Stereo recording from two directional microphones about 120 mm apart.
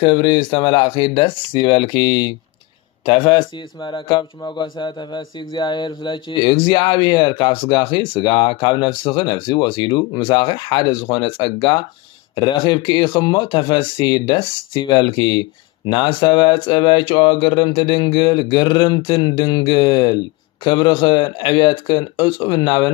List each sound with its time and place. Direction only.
0.0 s speech: 40° left (ahead or behind)